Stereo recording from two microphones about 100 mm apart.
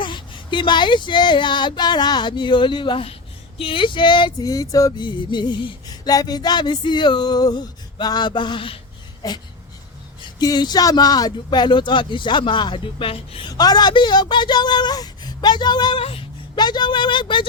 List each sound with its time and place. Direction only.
0.0 s music: 55° left (ahead or behind)
3.6 s female singing: 60° left (ahead or behind)
4.4 s music: 35° left (ahead or behind); by 8.8 s 60° left (ahead or behind)
9.2 s speech: 40° left (ahead or behind)
10.4 s speech: 40° left (ahead or behind)
11.3 s music: 50° left (ahead or behind)
13.5 s music: 40° left (ahead or behind)
16.0 s a sound: 65° left (ahead or behind)
16.6 s music: 45° left (ahead or behind)